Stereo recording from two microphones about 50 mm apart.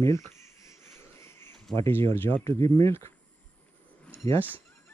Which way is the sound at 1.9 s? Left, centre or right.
Left.